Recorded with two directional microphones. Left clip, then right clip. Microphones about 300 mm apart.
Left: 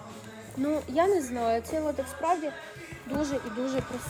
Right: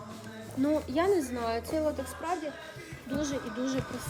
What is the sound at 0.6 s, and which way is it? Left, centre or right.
A woman's voice, centre.